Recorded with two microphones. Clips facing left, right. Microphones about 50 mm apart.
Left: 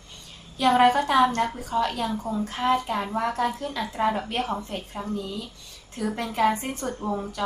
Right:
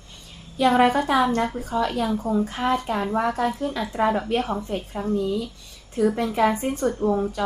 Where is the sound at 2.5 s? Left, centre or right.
Centre.